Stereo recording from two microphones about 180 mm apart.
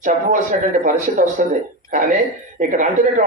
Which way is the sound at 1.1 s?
45° right (ahead or behind).